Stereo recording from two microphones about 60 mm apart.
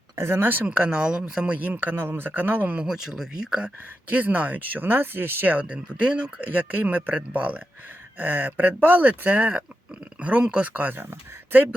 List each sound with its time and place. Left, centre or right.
0.2 s speech: right
2.7 s speech: centre
4.1 s speech: right
5.6 s speech: centre; by 11.6 s right